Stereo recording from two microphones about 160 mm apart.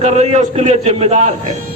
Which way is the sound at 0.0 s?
40° right (ahead or behind).